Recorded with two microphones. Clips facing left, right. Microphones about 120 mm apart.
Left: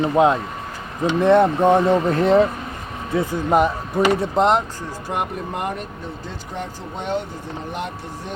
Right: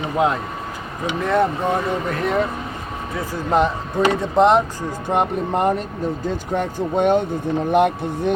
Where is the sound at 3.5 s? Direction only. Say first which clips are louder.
Even; 10° left (ahead or behind).